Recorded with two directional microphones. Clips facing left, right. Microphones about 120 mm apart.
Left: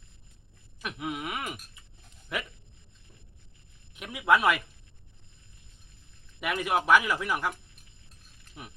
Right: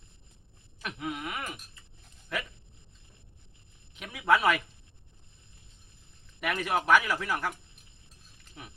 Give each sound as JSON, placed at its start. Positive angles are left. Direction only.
{"t": 0.8, "sound": "speech", "side_deg": 10}
{"t": 3.9, "sound": "speech", "side_deg": 10}
{"t": 6.4, "sound": "speech", "side_deg": 10}